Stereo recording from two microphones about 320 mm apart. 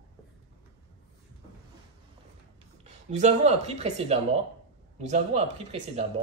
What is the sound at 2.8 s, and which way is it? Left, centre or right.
Speech, right.